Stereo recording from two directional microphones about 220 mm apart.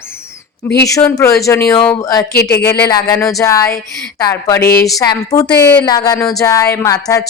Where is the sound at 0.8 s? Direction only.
15° left (ahead or behind).